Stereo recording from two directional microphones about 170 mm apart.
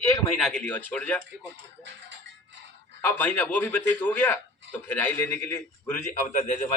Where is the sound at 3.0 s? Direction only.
10° left (ahead or behind).